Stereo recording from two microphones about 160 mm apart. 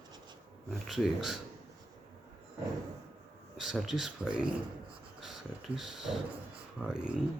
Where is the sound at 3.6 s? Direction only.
Centre (ahead or behind).